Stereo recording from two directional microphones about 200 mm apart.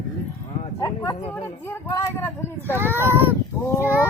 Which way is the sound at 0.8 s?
15° left (ahead or behind).